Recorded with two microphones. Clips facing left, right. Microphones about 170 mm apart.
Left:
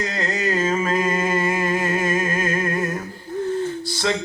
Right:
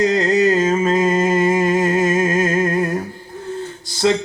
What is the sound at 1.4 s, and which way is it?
Music, 30° right (ahead or behind).